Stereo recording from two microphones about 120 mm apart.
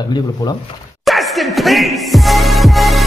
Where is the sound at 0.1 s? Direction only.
35° left (ahead or behind).